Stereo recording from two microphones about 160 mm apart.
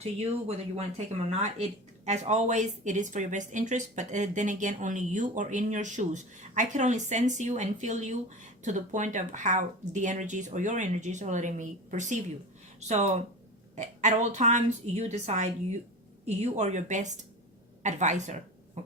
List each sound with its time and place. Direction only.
0.0 s speech: 45° right (ahead or behind)